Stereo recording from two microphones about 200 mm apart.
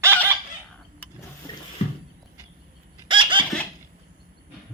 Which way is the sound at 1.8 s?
30° left (ahead or behind).